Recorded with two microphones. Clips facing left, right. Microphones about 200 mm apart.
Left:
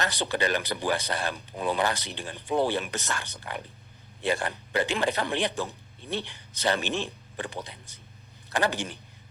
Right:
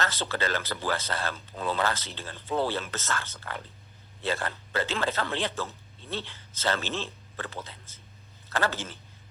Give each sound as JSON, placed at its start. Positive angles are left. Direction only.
{"t": 0.0, "sound": "speech", "side_deg": 15}